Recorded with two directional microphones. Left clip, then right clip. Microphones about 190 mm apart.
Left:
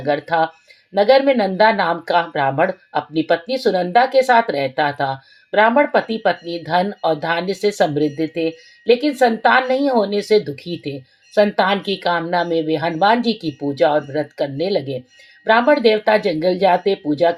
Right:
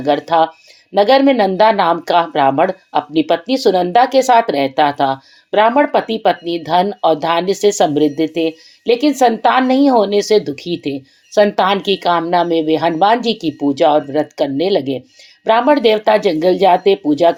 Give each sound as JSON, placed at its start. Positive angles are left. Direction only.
{"t": 0.0, "sound": "speech", "side_deg": -30}